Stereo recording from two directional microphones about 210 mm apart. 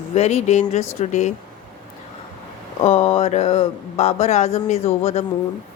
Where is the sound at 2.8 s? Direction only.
30° left (ahead or behind).